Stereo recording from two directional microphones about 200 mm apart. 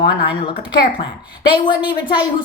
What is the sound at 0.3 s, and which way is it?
A woman's voice, 20° left (ahead or behind).